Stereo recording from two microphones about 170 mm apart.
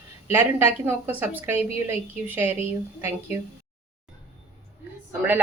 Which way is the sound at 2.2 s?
10° right (ahead or behind).